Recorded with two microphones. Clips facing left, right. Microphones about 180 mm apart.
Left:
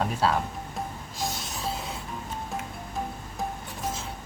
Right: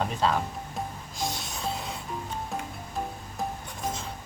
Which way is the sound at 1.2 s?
Centre (ahead or behind).